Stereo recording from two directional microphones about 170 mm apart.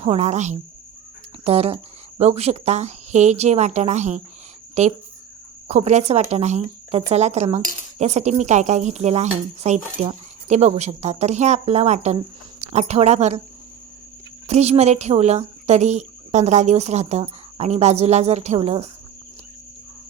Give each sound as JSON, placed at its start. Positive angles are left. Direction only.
{"t": 0.0, "sound": "cutlery", "side_deg": -40}
{"t": 4.7, "sound": "speech", "side_deg": -40}
{"t": 5.6, "sound": "cutlery", "side_deg": -40}
{"t": 14.4, "sound": "cutlery", "side_deg": -40}